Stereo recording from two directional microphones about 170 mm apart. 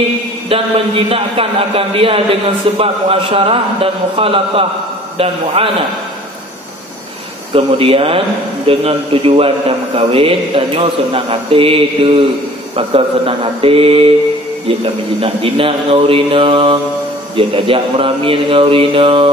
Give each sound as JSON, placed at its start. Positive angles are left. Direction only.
{"t": 0.5, "sound": "speech", "side_deg": -35}
{"t": 7.5, "sound": "speech", "side_deg": -35}